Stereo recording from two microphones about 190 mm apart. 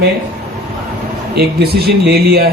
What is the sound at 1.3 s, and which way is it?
Speech, 55° right (ahead or behind).